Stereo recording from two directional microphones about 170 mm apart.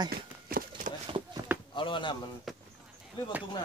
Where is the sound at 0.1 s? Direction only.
60° right (ahead or behind).